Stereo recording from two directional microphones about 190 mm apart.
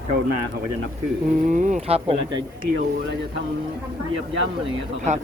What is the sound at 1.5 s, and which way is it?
Speech, 40° right (ahead or behind).